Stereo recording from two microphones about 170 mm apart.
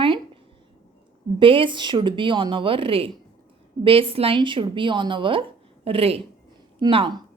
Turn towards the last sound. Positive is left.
turn(degrees=-30)  # may be behind; listen again after turning